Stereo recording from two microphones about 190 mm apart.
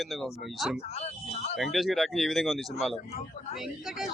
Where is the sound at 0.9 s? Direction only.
35° left (ahead or behind).